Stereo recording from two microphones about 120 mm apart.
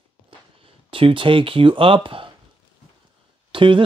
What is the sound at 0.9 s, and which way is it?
Speech, 45° right (ahead or behind).